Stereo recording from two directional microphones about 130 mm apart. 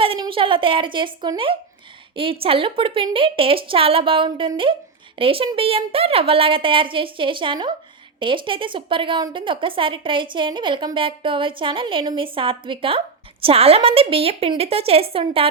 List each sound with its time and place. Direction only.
0.0 s a woman's voice: 45° right (ahead or behind)